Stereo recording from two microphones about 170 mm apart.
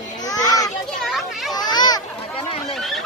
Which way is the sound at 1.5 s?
25° left (ahead or behind).